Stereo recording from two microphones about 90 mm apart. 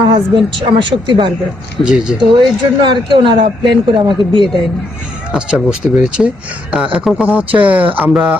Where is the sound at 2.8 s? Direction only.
60° right (ahead or behind).